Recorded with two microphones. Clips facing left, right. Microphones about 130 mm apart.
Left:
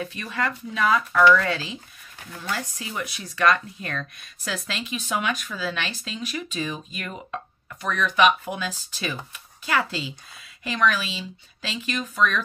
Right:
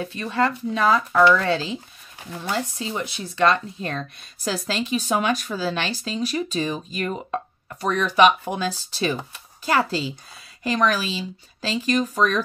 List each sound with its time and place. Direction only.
0.0 s speech: 30° right (ahead or behind)
2.1 s speech: 20° right (ahead or behind); by 12.4 s 40° right (ahead or behind)